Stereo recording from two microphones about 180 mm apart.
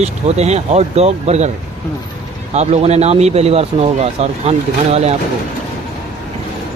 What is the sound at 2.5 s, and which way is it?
Speech, 35° right (ahead or behind).